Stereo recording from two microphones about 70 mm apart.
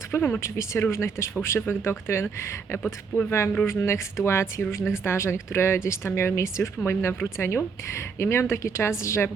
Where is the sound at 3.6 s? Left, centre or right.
Left.